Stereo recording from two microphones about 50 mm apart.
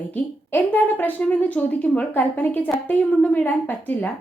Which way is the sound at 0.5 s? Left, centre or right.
Left.